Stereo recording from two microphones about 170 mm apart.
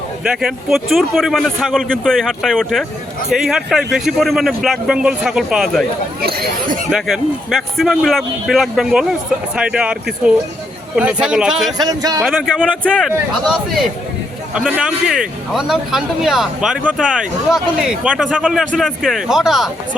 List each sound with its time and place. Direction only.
0.3 s speech: centre (ahead or behind)
6.2 s speech: 60° right (ahead or behind)
6.9 s speech: centre (ahead or behind)
11.8 s speech: 20° right (ahead or behind)
12.2 s speech: centre (ahead or behind)